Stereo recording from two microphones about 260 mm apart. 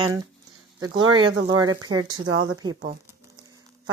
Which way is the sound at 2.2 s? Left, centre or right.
Right.